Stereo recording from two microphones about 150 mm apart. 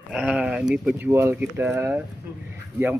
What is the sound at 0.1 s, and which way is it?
Speech, 5° right (ahead or behind).